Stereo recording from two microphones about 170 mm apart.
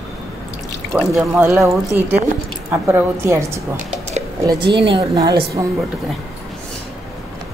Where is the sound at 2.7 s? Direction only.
10° right (ahead or behind).